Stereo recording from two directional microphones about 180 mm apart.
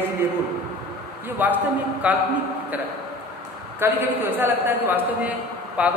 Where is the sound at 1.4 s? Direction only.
10° right (ahead or behind).